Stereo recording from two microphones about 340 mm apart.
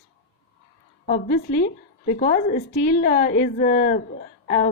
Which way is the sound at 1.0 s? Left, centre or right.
Left.